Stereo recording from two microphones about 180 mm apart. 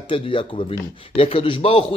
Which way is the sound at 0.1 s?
30° left (ahead or behind).